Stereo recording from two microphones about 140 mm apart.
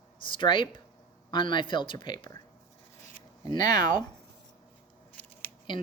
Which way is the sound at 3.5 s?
25° left (ahead or behind).